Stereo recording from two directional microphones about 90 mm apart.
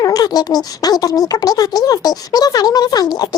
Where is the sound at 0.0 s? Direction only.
45° left (ahead or behind).